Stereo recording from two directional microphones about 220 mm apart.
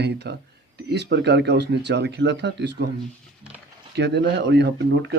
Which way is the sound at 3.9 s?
50° right (ahead or behind).